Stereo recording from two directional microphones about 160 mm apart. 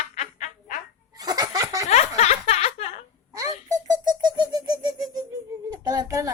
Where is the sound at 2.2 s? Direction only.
40° left (ahead or behind).